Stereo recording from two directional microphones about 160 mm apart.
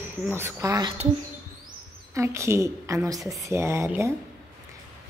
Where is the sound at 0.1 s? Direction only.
15° right (ahead or behind).